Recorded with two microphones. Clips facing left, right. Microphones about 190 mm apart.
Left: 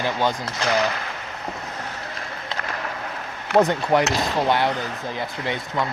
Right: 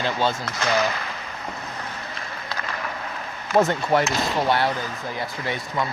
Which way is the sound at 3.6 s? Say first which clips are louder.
Left 1 dB; 15° left (ahead or behind).